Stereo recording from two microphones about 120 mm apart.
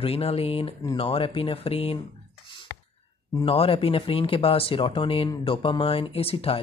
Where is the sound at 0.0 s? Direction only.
55° left (ahead or behind).